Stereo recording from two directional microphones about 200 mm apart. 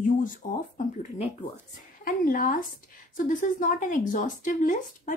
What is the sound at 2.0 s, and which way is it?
A woman's voice, 45° left (ahead or behind).